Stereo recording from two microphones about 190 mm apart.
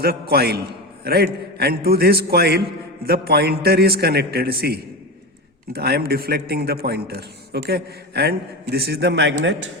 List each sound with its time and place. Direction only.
0.0 s a man's voice: 55° right (ahead or behind); by 9.6 s 75° right (ahead or behind)